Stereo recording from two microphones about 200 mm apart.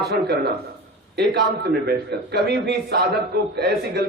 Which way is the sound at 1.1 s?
55° right (ahead or behind).